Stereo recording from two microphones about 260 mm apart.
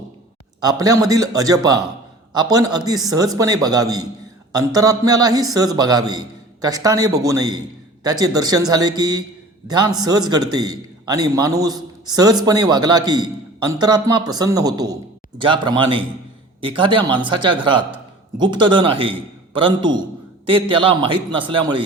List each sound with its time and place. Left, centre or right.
0.6 s a man's voice: centre